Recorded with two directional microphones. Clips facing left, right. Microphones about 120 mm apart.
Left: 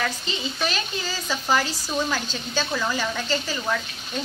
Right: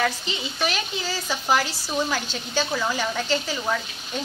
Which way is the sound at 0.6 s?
10° right (ahead or behind).